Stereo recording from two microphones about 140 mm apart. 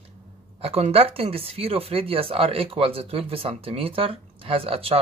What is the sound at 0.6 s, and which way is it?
Speech, 45° right (ahead or behind).